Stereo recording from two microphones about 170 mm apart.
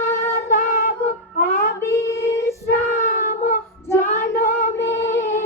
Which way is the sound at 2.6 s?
50° left (ahead or behind).